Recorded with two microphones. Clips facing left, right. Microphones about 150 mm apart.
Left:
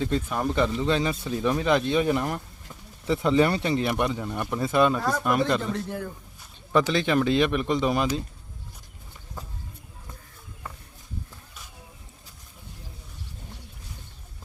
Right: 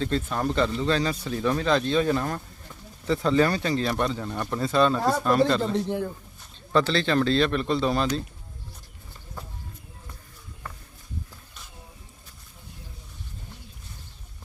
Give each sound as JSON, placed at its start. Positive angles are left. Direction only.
{"t": 0.0, "sound": "speech", "side_deg": 10}
{"t": 5.6, "sound": "a man's voice", "side_deg": -25}
{"t": 6.7, "sound": "speech", "side_deg": 15}